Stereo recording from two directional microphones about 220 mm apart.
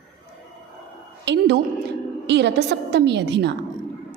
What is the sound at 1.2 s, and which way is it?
A woman's voice, 50° right (ahead or behind).